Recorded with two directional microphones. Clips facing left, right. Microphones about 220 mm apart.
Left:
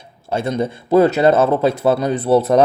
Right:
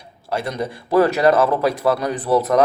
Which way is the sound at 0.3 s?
25° left (ahead or behind).